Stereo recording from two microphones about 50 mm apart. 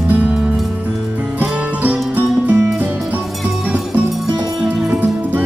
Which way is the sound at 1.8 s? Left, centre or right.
Right.